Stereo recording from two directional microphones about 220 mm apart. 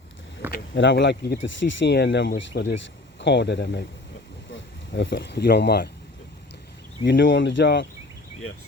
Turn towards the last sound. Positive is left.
turn(degrees=55)  # may be behind; listen again after turning